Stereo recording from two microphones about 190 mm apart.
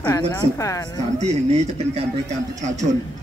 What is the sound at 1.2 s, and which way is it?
Speech, 35° right (ahead or behind).